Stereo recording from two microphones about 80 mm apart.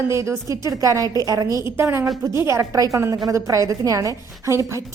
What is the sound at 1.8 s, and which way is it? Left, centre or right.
A woman's voice, right.